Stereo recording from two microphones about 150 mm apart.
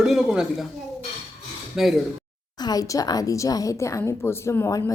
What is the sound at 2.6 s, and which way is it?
A woman's voice, 25° left (ahead or behind).